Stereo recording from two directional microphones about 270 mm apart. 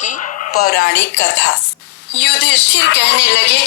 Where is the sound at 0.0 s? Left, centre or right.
Left.